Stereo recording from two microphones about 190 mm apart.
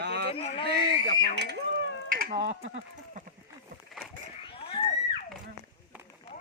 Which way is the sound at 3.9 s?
Centre (ahead or behind).